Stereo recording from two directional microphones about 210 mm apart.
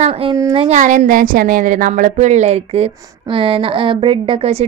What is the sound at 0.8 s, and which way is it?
A woman's voice, 35° right (ahead or behind).